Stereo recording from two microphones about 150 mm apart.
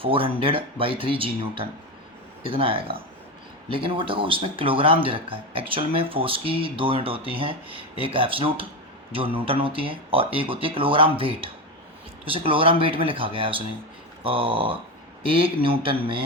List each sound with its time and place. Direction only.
0.0 s speech: 35° right (ahead or behind)